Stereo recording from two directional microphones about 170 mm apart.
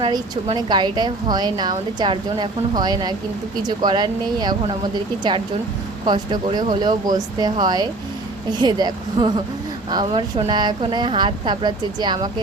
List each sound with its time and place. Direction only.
0.0 s a woman's voice: 30° right (ahead or behind)
6.1 s a woman's voice: 25° right (ahead or behind)